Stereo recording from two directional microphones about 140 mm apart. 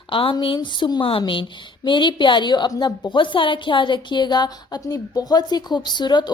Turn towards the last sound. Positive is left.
turn(degrees=30)  # may be behind; listen again after turning